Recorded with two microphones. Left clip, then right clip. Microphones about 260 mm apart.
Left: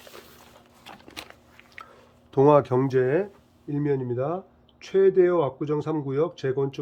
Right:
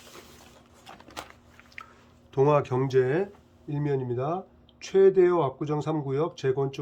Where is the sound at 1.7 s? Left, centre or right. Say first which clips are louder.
Even; left.